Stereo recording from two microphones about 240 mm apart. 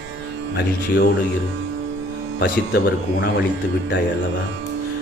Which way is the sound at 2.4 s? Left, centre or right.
Left.